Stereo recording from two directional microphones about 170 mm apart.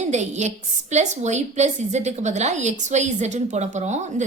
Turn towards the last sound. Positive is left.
turn(degrees=-45)  # may be behind; listen again after turning